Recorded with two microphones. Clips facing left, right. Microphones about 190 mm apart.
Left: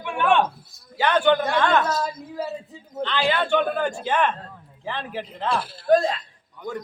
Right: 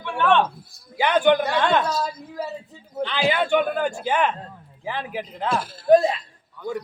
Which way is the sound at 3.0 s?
10° right (ahead or behind).